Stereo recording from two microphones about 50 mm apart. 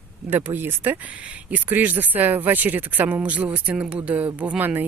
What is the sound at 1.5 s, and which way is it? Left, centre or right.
Speech, right.